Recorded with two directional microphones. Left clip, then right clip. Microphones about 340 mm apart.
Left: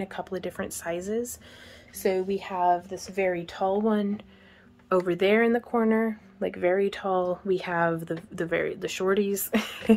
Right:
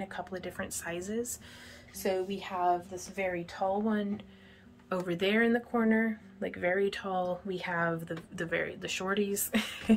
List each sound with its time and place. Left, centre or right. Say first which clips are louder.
0.0 s speech: left 6 dB; left